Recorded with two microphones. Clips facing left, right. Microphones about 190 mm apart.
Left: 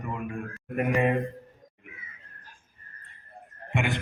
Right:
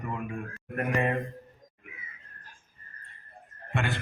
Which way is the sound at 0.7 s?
15° left (ahead or behind).